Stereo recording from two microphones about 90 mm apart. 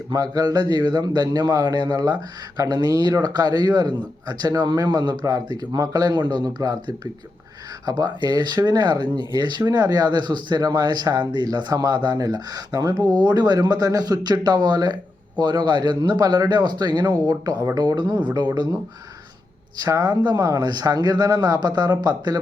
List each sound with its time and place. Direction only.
0.1 s a man's voice: 45° right (ahead or behind)
11.4 s a man's voice: 45° right (ahead or behind)
19.8 s a man's voice: 45° right (ahead or behind)